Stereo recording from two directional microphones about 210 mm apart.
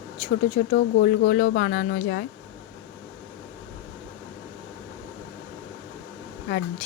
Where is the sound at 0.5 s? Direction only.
40° left (ahead or behind).